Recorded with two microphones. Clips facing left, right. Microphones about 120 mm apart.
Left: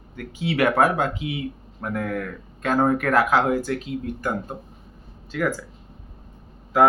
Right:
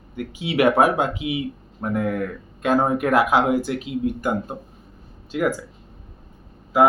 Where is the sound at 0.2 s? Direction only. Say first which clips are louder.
Right 2 dB; 15° right (ahead or behind).